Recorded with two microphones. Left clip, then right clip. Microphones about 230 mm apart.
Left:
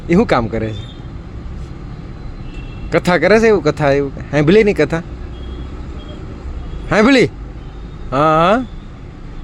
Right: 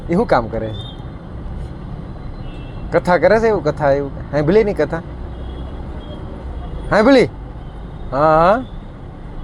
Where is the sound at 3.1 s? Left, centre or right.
Left.